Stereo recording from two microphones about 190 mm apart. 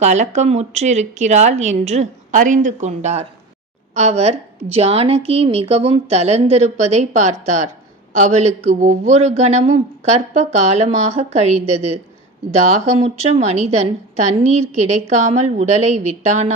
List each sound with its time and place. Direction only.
0.0 s speech: 35° right (ahead or behind)